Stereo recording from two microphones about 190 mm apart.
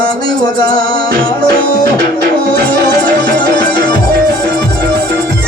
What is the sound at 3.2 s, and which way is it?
Music, 25° left (ahead or behind).